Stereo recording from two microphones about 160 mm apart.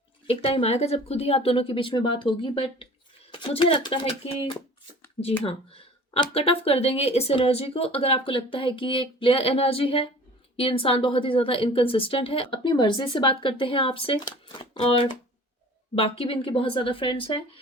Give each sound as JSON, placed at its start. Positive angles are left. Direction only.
{"t": 0.3, "sound": "speech", "side_deg": 35}
{"t": 6.3, "sound": "speech", "side_deg": 35}